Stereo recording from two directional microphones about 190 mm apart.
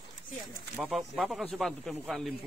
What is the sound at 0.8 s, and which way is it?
Speech, centre (ahead or behind).